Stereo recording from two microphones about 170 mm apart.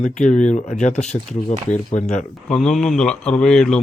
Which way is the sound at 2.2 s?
5° left (ahead or behind).